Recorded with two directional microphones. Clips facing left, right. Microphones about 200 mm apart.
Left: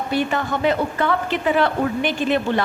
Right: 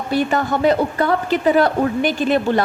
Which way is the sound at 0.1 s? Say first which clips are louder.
Right 4 dB; 40° right (ahead or behind).